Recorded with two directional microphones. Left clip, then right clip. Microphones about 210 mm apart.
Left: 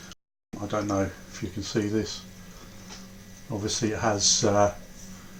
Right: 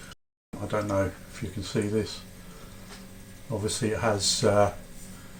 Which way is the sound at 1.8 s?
15° left (ahead or behind).